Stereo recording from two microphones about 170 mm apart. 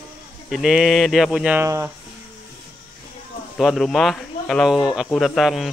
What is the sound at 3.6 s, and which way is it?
Speech, centre (ahead or behind).